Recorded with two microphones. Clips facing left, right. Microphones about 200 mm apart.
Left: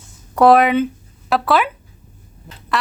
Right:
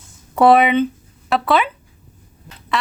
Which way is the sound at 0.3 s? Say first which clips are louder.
Left 1 dB; centre (ahead or behind).